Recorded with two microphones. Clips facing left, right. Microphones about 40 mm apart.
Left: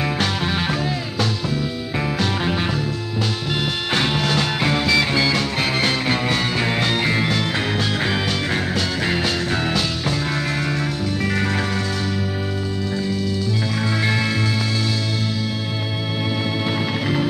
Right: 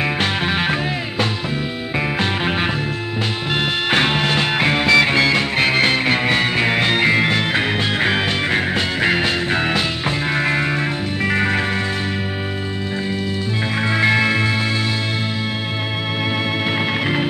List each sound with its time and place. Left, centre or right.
0.0 s music: right
2.0 s music: right
3.9 s music: right
13.9 s music: right
16.7 s music: right